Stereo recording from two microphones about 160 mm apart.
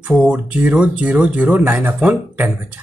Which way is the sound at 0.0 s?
5° right (ahead or behind).